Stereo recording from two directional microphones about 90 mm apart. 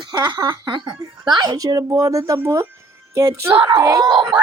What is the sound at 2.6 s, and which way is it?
Music, 30° right (ahead or behind).